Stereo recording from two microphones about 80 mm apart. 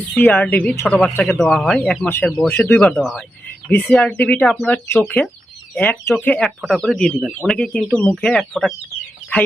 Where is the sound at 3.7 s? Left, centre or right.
Centre.